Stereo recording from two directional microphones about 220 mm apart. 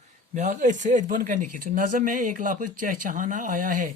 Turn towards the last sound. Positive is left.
turn(degrees=-35)  # may be behind; listen again after turning